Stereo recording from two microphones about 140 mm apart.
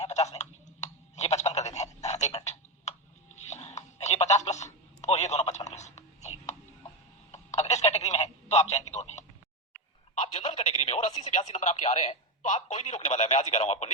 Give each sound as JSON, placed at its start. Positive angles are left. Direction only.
{"t": 0.0, "sound": "typing", "side_deg": 50}
{"t": 3.3, "sound": "telephone", "side_deg": 55}